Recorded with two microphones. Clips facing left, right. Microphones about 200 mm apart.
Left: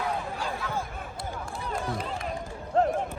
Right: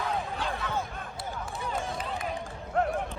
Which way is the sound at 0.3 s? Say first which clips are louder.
Even; centre (ahead or behind).